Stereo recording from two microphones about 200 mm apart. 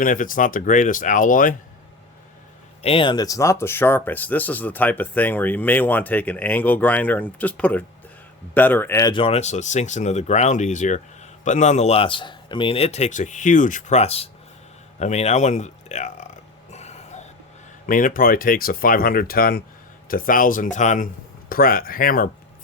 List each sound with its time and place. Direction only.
0.0 s speech: 40° left (ahead or behind)
2.8 s speech: 25° left (ahead or behind)
16.7 s a sound: 35° left (ahead or behind)
17.8 s speech: 45° left (ahead or behind)